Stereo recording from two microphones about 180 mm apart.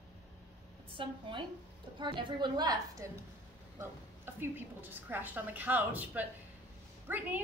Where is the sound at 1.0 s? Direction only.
30° right (ahead or behind).